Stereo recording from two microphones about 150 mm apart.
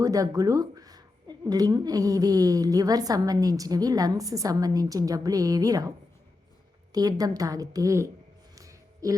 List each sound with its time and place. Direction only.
0.0 s speech: 25° right (ahead or behind)
6.9 s speech: 25° right (ahead or behind)
8.5 s a sound: 20° right (ahead or behind)